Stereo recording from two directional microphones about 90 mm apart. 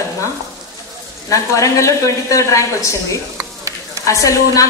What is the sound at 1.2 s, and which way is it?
A woman's voice, 35° left (ahead or behind).